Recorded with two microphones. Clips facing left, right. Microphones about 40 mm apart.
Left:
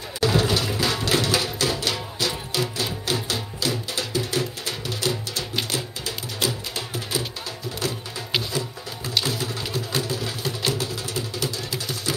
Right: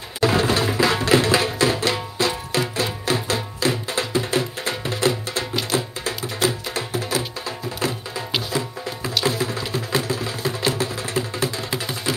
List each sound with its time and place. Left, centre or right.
0.2 s music: right
9.2 s music: right